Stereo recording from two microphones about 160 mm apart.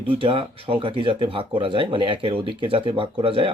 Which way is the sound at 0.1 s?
35° right (ahead or behind).